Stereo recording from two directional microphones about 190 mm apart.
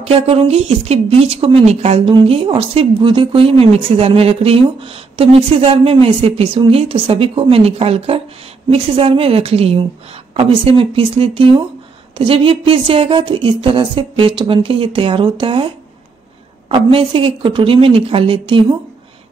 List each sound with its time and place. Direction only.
0.0 s speech: 30° right (ahead or behind)